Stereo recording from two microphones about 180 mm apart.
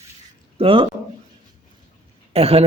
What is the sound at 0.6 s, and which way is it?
Speech, 30° right (ahead or behind).